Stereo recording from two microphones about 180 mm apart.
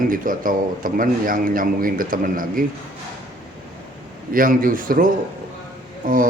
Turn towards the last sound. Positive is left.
turn(degrees=-50)  # may be behind; listen again after turning